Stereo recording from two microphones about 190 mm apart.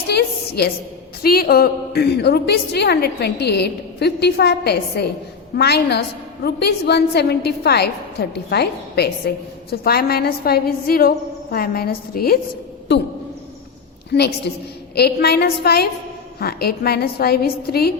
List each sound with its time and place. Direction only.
0.1 s a sound: 60° left (ahead or behind)
1.2 s a woman's voice: 55° left (ahead or behind)
14.1 s a woman's voice: 60° left (ahead or behind)